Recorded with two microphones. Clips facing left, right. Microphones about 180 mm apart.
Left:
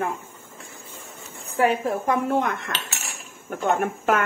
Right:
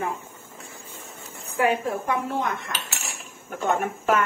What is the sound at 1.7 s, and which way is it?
Speech, 50° left (ahead or behind).